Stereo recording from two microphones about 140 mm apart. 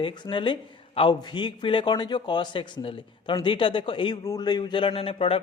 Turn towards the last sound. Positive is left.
turn(degrees=40)  # may be behind; listen again after turning